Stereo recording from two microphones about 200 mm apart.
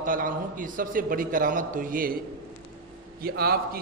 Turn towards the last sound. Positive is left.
turn(degrees=-50)  # may be behind; listen again after turning